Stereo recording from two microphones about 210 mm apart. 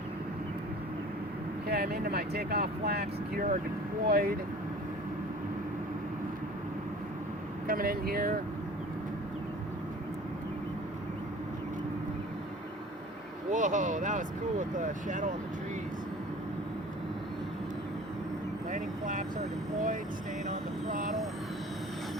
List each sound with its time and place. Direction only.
1.6 s speech: 45° right (ahead or behind)
7.7 s speech: 45° right (ahead or behind)
13.5 s speech: 35° right (ahead or behind)
18.7 s speech: 35° right (ahead or behind)
20.5 s vehicle: 35° right (ahead or behind)